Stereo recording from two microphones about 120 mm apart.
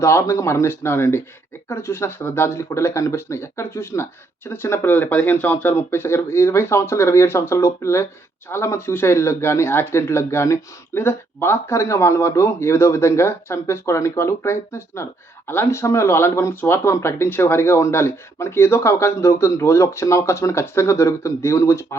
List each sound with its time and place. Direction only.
0.0 s speech: 25° left (ahead or behind)